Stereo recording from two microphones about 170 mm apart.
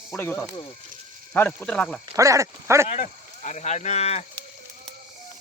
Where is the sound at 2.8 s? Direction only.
45° left (ahead or behind).